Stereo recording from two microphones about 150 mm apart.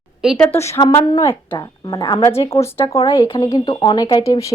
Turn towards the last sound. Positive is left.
turn(degrees=25)  # may be behind; listen again after turning